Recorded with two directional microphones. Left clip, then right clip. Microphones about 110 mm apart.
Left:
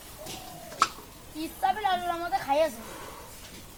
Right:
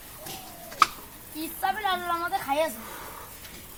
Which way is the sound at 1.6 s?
90° right.